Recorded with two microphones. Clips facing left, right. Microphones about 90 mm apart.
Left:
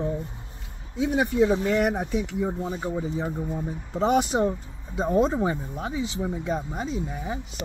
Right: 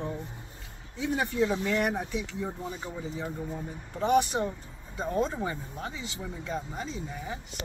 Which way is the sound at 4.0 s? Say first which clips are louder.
Left 3 dB; 20° left (ahead or behind).